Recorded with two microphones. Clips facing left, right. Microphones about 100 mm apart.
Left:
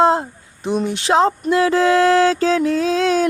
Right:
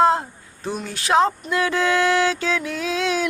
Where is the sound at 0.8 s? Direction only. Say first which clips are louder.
Left 2 dB; 25° left (ahead or behind).